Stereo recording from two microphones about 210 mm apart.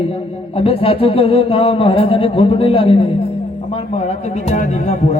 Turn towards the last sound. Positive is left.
turn(degrees=35)  # may be behind; listen again after turning